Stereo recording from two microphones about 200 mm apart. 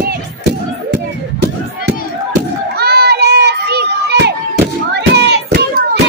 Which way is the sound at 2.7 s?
55° right (ahead or behind).